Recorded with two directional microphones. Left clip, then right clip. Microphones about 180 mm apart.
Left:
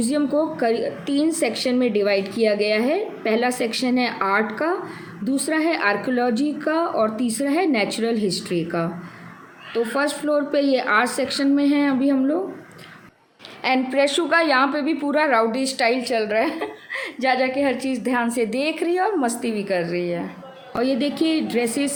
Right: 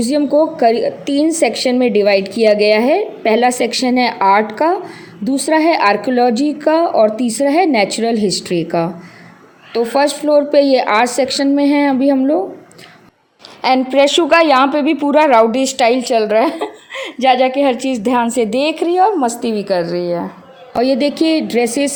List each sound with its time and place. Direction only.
0.0 s a woman's voice: 30° right (ahead or behind)
13.6 s a woman's voice: 30° right (ahead or behind)